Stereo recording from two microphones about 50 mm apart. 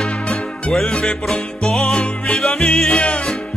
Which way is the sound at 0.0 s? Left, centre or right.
Centre.